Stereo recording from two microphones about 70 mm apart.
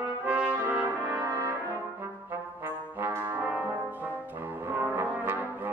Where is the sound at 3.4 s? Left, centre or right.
Right.